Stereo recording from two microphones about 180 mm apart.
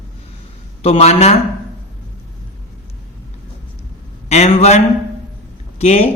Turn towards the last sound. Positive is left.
turn(degrees=35)  # may be behind; listen again after turning